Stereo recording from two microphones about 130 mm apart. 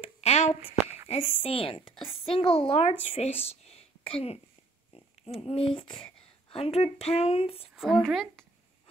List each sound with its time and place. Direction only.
0.0 s a sound: 55° left (ahead or behind)
1.4 s a woman's voice: 45° left (ahead or behind)
5.9 s whispering: 5° left (ahead or behind)
6.5 s a woman's voice: 50° left (ahead or behind)
7.7 s speech: centre (ahead or behind)